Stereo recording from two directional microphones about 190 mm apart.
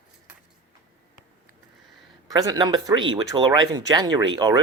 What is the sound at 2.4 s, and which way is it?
Speech, 20° right (ahead or behind).